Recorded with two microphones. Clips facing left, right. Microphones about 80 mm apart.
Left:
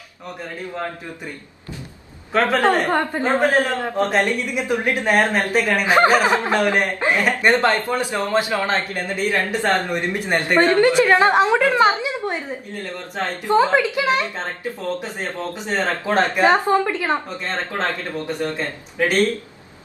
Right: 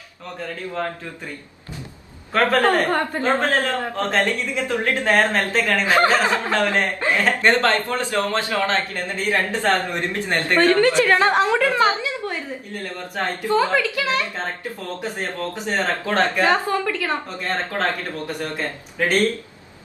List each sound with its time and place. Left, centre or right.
2.3 s a woman's voice: centre
2.9 s a woman's voice: left